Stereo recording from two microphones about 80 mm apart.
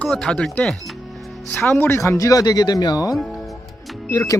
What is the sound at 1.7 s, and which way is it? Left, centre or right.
Speech, left.